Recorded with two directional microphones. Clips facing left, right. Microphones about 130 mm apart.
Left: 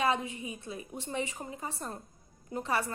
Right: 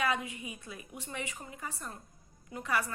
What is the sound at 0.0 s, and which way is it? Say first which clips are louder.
A woman's voice: left 3 dB; 30° left (ahead or behind).